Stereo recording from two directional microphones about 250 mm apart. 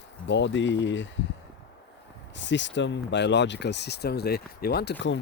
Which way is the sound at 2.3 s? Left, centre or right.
Left.